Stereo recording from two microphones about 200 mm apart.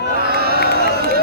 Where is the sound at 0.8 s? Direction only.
50° right (ahead or behind).